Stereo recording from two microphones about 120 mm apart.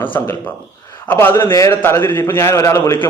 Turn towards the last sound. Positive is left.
turn(degrees=20)  # may be behind; listen again after turning